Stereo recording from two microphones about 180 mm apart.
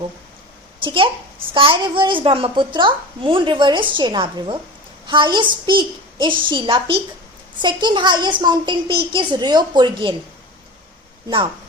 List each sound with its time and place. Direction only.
0.9 s a woman's voice: 30° right (ahead or behind)